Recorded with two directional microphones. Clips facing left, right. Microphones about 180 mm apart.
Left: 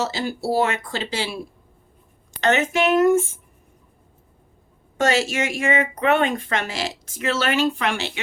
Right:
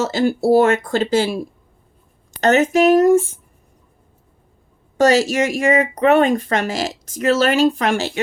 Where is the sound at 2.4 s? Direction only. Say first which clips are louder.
Right 6 dB; 40° right (ahead or behind).